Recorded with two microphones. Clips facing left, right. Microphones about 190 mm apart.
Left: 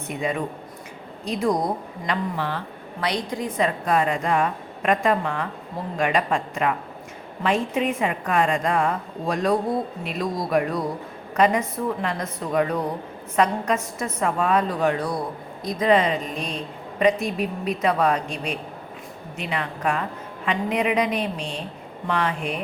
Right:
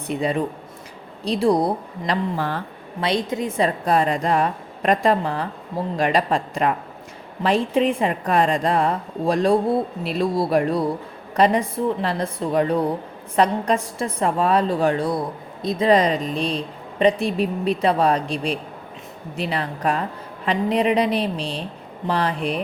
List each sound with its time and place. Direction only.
0.1 s speech: 35° right (ahead or behind)
3.0 s speech: 25° right (ahead or behind)
15.9 s speech: 35° right (ahead or behind)